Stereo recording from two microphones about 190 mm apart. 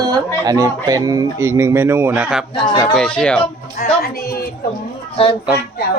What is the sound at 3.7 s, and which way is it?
Speech, 50° left (ahead or behind).